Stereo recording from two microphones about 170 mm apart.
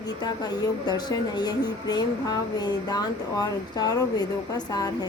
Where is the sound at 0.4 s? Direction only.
25° left (ahead or behind).